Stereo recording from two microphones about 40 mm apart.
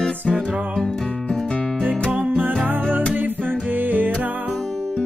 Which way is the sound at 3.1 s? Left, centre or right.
Right.